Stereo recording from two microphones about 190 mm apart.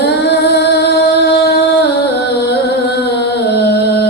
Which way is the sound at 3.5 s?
60° left (ahead or behind).